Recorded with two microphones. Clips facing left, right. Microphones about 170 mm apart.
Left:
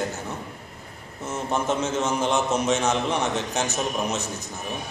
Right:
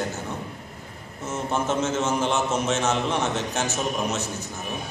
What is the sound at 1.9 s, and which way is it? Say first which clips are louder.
Speech: even; 5° right (ahead or behind).